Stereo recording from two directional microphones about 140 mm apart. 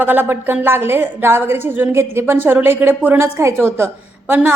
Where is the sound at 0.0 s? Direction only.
15° right (ahead or behind).